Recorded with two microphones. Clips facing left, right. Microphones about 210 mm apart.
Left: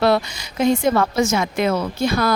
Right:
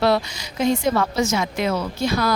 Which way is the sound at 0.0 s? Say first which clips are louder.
Left 2 dB; 55° left (ahead or behind).